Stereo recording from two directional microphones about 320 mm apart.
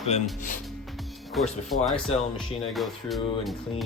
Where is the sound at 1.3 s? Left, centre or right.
Centre.